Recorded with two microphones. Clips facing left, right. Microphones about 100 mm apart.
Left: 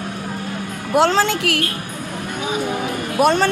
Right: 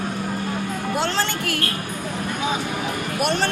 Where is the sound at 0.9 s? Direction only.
85° left.